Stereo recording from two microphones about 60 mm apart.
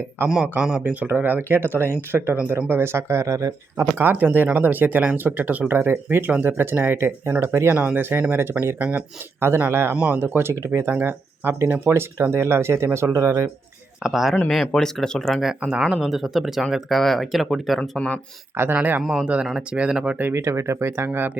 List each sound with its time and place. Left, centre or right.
0.2 s speech: right
0.8 s speech: right
3.8 s speech: right
8.8 s speech: right
9.7 s speech: right
12.2 s speech: right
14.0 s speech: centre
14.5 s speech: centre
15.4 s speech: centre
17.7 s speech: centre
18.5 s speech: right
19.2 s speech: centre
20.3 s speech: right